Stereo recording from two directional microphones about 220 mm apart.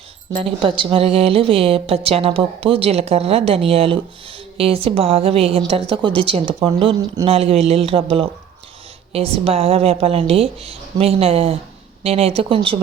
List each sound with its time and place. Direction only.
0.3 s a woman's voice: 25° right (ahead or behind)
9.1 s a woman's voice: 25° right (ahead or behind)